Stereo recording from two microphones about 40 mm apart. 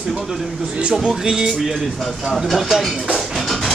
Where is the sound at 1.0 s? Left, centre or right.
Centre.